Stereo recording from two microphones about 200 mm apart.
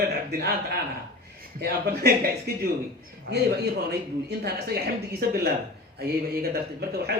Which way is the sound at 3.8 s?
50° right (ahead or behind).